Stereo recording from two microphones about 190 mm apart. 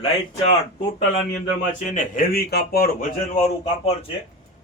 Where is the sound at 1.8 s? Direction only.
40° left (ahead or behind).